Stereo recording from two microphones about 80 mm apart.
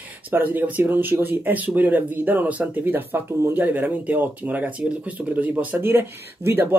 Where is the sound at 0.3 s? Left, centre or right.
Right.